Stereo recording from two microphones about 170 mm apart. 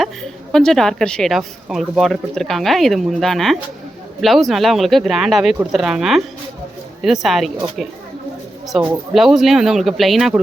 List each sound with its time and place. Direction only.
0.0 s a woman's voice: centre (ahead or behind)